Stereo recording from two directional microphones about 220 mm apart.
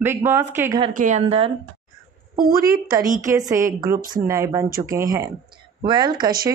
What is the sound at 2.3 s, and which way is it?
Speech, 40° right (ahead or behind).